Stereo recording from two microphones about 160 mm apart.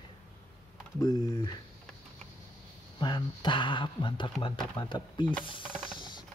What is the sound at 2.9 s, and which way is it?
Speech, 25° left (ahead or behind).